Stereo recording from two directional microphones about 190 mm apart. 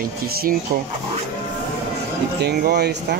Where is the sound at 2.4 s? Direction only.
55° right (ahead or behind).